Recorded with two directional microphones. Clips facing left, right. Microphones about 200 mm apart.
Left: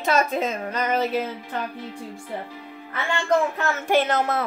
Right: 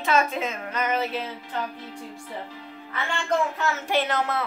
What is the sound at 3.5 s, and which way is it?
Speech, 50° left (ahead or behind).